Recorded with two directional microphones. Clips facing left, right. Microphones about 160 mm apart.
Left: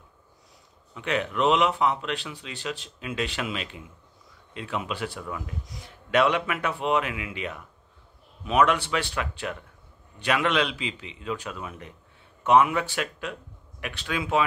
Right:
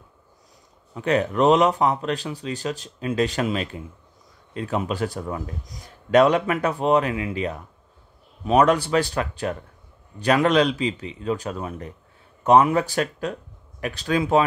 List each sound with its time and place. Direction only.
0.9 s speech: 40° right (ahead or behind)